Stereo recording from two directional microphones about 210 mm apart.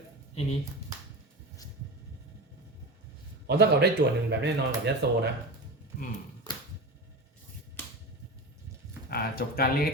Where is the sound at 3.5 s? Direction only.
50° right (ahead or behind).